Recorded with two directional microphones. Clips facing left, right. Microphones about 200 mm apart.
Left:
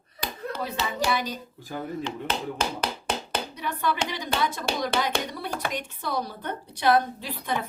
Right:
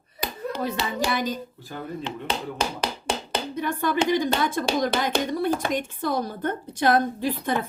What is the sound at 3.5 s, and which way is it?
A woman's voice, 50° right (ahead or behind).